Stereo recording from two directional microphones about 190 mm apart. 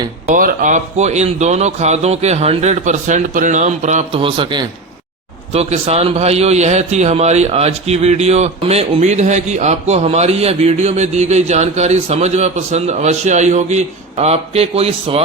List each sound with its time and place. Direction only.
0.3 s a man's voice: 45° right (ahead or behind)